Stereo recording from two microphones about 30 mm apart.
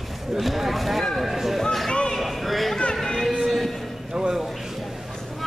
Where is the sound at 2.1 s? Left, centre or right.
Centre.